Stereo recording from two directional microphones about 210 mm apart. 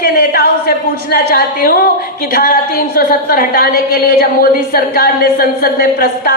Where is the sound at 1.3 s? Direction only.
45° left (ahead or behind).